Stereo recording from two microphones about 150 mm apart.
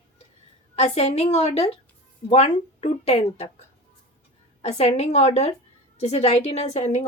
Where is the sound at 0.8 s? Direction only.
45° left (ahead or behind).